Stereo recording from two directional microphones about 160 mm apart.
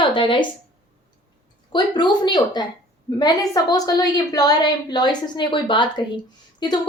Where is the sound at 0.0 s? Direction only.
30° left (ahead or behind).